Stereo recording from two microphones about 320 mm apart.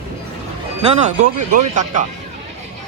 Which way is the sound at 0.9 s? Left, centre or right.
Right.